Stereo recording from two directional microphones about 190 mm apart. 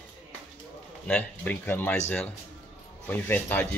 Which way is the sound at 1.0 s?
10° left (ahead or behind).